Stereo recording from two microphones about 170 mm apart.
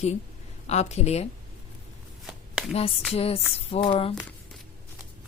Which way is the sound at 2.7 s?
35° left (ahead or behind).